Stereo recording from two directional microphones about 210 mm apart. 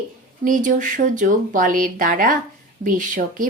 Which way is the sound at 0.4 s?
40° right (ahead or behind).